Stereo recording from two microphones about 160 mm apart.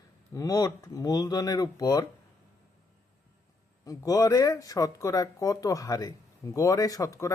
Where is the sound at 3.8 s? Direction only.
20° left (ahead or behind).